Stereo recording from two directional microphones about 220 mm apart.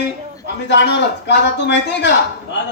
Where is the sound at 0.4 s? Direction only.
55° left (ahead or behind).